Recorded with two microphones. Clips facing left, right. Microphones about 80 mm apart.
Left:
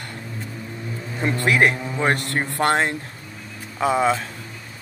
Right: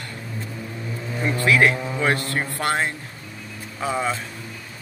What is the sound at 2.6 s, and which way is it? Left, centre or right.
Speech, left.